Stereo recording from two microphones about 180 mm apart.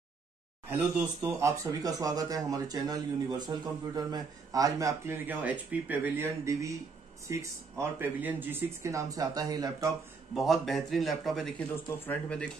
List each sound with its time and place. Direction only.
0.7 s speech: 10° right (ahead or behind)
10.3 s a man's voice: centre (ahead or behind)